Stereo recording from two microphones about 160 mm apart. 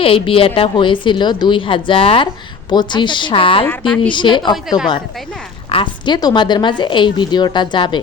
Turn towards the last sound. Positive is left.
turn(degrees=30)  # may be behind; listen again after turning